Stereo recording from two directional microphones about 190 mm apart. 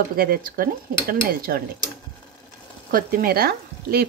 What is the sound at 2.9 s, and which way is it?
Speech, 50° right (ahead or behind).